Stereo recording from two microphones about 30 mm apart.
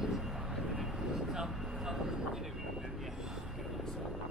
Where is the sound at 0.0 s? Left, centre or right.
Centre.